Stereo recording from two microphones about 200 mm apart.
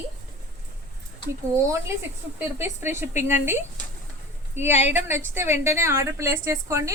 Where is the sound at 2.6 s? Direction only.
10° right (ahead or behind).